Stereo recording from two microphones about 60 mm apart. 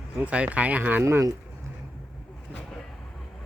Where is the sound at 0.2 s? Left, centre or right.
Right.